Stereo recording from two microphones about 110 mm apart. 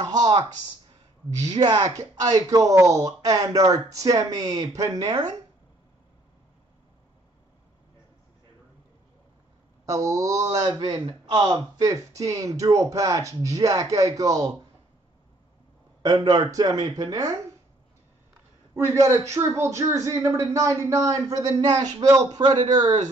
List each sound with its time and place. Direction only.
0.0 s speech: 35° right (ahead or behind)
1.6 s speech: 40° right (ahead or behind)
9.8 s speech: 30° right (ahead or behind)
10.6 s speech: 45° right (ahead or behind)
11.8 s speech: 30° right (ahead or behind)
16.0 s speech: 40° right (ahead or behind)
18.9 s speech: 25° right (ahead or behind)